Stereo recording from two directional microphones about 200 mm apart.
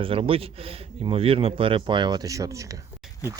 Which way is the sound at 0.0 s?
30° right (ahead or behind).